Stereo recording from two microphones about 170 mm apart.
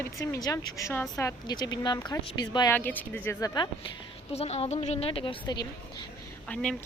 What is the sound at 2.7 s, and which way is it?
Speech, 10° left (ahead or behind).